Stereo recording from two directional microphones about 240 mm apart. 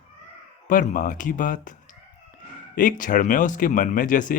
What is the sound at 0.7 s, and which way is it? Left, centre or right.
Speech, left.